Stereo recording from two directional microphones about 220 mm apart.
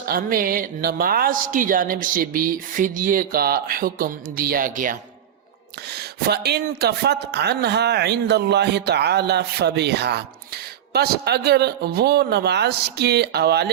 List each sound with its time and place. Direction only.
0.0 s a man's voice: 40° right (ahead or behind)